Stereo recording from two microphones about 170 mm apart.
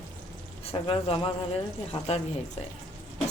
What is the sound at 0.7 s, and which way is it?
Speech, 35° left (ahead or behind).